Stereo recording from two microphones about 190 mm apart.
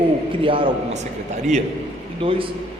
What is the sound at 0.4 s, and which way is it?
Speech, 25° right (ahead or behind).